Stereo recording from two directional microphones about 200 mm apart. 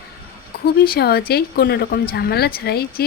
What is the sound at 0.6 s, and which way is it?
Speech, 50° left (ahead or behind).